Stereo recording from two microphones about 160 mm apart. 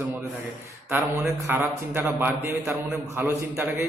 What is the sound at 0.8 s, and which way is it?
A man's voice, 15° right (ahead or behind).